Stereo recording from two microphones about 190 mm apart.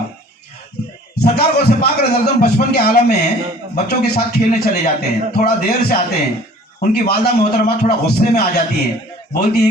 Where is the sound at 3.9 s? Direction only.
55° left (ahead or behind).